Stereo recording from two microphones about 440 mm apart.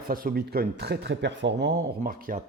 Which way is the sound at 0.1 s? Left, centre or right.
Centre.